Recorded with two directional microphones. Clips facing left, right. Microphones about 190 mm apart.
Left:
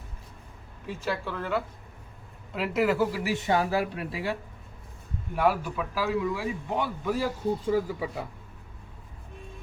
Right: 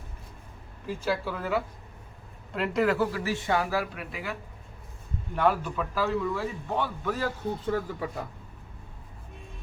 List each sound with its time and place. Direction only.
0.9 s a man's voice: centre (ahead or behind); by 4.4 s 30° left (ahead or behind)
5.3 s a man's voice: 10° left (ahead or behind)